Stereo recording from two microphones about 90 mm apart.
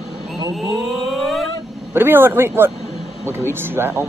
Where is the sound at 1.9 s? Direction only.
25° right (ahead or behind).